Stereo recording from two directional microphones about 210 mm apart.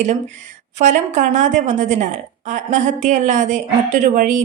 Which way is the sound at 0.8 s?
35° right (ahead or behind).